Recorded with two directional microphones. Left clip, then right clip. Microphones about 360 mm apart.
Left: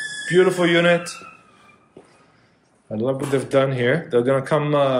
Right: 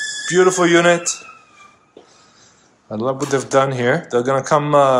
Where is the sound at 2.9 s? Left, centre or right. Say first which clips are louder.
Right 3 dB; centre.